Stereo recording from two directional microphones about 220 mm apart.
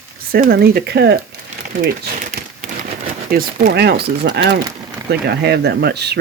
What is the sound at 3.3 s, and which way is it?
Speech, 40° right (ahead or behind).